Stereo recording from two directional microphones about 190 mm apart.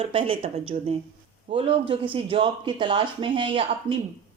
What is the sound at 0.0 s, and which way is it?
A woman's voice, 30° right (ahead or behind).